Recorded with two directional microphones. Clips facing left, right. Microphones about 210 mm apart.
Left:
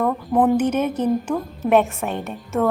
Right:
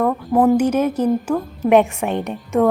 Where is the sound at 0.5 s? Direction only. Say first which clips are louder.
Right 3 dB; 10° right (ahead or behind).